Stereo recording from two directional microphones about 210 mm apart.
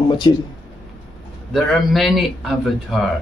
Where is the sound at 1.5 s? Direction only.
Centre (ahead or behind).